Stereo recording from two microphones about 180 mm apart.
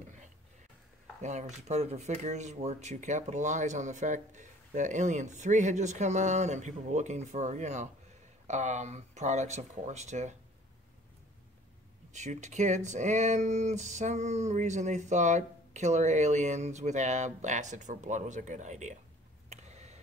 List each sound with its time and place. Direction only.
1.2 s speech: 40° right (ahead or behind)
12.1 s speech: 40° right (ahead or behind)
19.5 s a sound: 40° right (ahead or behind)